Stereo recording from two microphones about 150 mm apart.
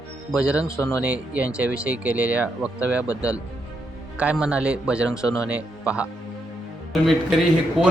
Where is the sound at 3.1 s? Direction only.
20° left (ahead or behind).